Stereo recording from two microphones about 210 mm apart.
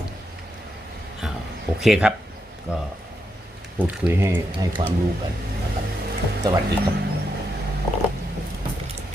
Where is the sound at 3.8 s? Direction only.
10° right (ahead or behind).